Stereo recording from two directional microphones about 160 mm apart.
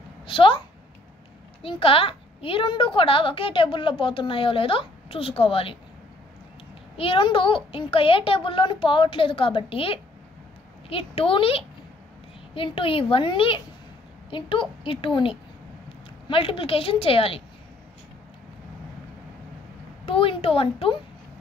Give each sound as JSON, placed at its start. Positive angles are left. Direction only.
{"t": 0.3, "sound": "a woman's voice", "side_deg": 35}
{"t": 7.0, "sound": "a woman's voice", "side_deg": 35}
{"t": 16.3, "sound": "a woman's voice", "side_deg": 35}
{"t": 20.1, "sound": "speech", "side_deg": 35}